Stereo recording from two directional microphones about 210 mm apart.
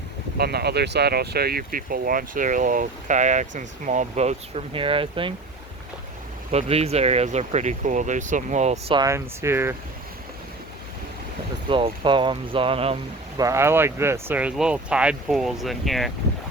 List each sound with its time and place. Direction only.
0.3 s speech: 50° right (ahead or behind); by 5.3 s 25° right (ahead or behind)
6.5 s speech: 30° right (ahead or behind)
9.0 s speech: 15° right (ahead or behind)
11.7 s speech: 25° right (ahead or behind)
13.4 s speech: 15° right (ahead or behind)